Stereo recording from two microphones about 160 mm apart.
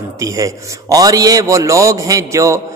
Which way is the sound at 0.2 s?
20° right (ahead or behind).